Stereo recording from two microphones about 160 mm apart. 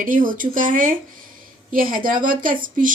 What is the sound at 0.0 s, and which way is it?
A woman's voice, 55° right (ahead or behind).